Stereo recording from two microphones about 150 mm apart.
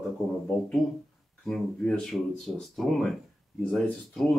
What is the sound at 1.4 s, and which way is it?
Speech, 5° left (ahead or behind).